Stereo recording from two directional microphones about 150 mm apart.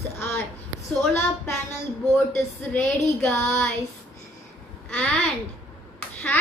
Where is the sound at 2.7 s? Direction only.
15° left (ahead or behind).